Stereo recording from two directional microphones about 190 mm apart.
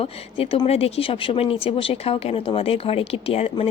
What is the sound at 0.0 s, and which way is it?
Speech, 30° left (ahead or behind).